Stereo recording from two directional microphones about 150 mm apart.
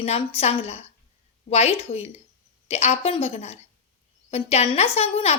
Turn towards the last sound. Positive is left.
turn(degrees=45)  # may be behind; listen again after turning